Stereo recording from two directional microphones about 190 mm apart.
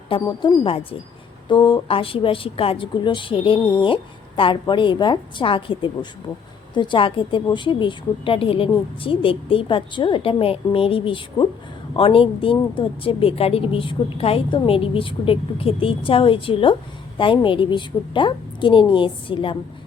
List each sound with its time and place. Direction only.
0.1 s speech: 25° left (ahead or behind)